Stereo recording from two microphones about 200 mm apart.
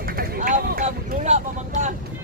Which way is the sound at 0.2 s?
40° right (ahead or behind).